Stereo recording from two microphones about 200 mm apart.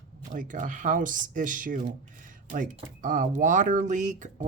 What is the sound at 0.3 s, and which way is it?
Speech, 40° right (ahead or behind).